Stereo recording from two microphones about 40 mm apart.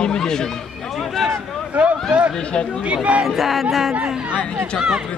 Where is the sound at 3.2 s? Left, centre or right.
Centre.